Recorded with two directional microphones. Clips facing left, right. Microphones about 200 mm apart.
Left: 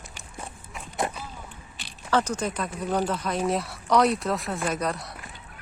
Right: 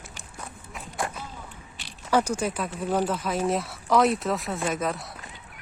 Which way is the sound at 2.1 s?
10° right (ahead or behind).